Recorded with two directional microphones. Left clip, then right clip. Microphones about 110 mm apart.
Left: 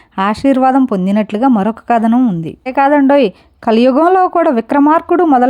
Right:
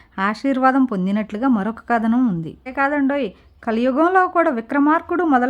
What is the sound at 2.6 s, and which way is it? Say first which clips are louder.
Speech: left 10 dB; 55° left (ahead or behind).